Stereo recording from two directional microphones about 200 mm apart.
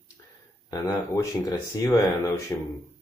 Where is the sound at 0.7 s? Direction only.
15° left (ahead or behind).